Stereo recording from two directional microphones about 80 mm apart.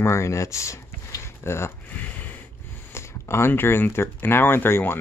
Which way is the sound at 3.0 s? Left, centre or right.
Left.